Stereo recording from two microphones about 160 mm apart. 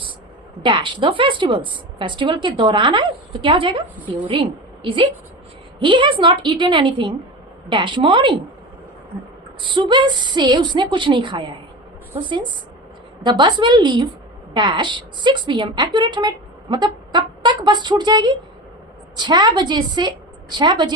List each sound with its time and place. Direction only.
0.6 s a woman's voice: 30° right (ahead or behind)
9.6 s a woman's voice: 30° right (ahead or behind)